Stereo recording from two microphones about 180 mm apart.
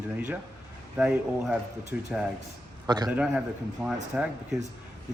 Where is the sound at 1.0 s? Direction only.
5° right (ahead or behind).